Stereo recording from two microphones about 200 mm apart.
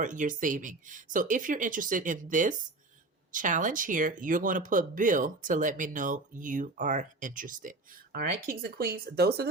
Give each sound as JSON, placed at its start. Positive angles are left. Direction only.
{"t": 0.0, "sound": "speech", "side_deg": -40}